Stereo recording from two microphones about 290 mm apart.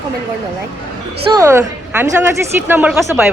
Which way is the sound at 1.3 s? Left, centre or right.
Centre.